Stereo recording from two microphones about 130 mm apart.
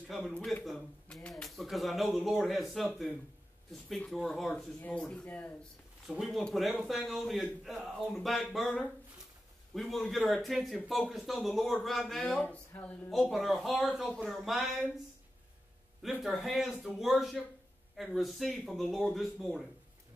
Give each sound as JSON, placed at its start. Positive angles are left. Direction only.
{"t": 0.1, "sound": "speech", "side_deg": 5}
{"t": 4.1, "sound": "speech", "side_deg": 0}
{"t": 6.0, "sound": "speech", "side_deg": 0}
{"t": 13.1, "sound": "speech", "side_deg": 0}
{"t": 16.0, "sound": "speech", "side_deg": 0}